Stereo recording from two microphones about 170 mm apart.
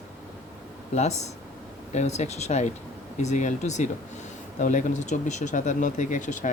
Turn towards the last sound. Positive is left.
turn(degrees=45)  # may be behind; listen again after turning